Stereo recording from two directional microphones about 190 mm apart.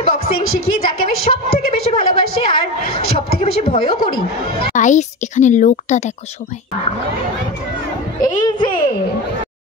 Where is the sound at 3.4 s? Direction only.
30° left (ahead or behind).